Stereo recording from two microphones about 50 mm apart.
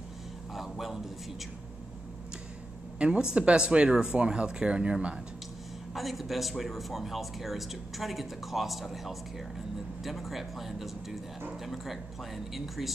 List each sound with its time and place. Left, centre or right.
0.6 s a sound: centre
3.0 s speech: centre
5.9 s speech: centre